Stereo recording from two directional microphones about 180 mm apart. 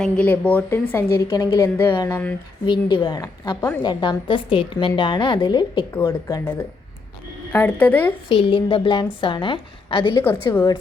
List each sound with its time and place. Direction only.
0.0 s a woman's voice: 5° left (ahead or behind)
2.6 s a woman's voice: 25° left (ahead or behind)
7.5 s a woman's voice: 10° left (ahead or behind)
8.3 s a woman's voice: 30° left (ahead or behind)